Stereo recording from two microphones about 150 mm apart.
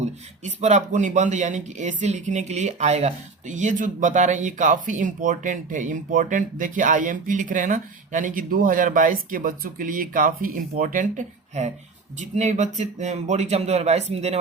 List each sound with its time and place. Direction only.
0.0 s speech: 50° right (ahead or behind)